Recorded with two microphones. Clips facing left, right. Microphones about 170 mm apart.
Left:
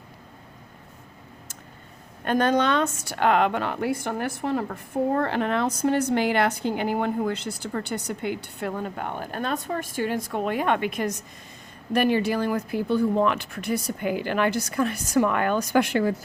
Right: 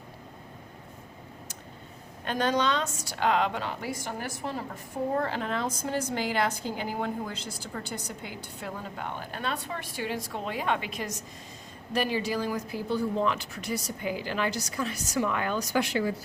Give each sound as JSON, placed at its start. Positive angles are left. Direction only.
{"t": 2.2, "sound": "a woman's voice", "side_deg": 55}